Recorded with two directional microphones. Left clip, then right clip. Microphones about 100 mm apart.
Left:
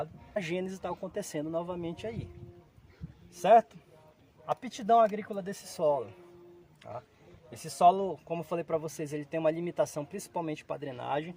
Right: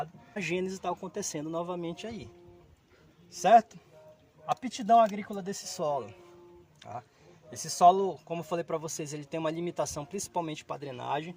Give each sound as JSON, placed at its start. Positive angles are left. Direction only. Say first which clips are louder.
{"t": 0.3, "sound": "speech", "louder": "right 1 dB", "side_deg": 30}
{"t": 3.3, "sound": "speech", "louder": "right 1 dB", "side_deg": 15}
{"t": 5.4, "sound": "speech", "louder": "left 3 dB", "side_deg": 25}